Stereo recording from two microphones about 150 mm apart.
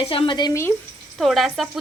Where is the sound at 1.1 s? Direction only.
Centre (ahead or behind).